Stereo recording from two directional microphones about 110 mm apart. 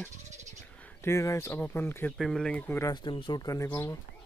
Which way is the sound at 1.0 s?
25° left (ahead or behind).